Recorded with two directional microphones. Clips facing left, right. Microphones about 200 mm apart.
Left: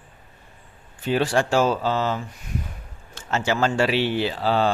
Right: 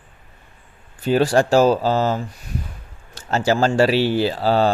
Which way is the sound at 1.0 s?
40° right (ahead or behind).